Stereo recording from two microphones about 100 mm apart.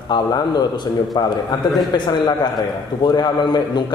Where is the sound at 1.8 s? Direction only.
50° left (ahead or behind).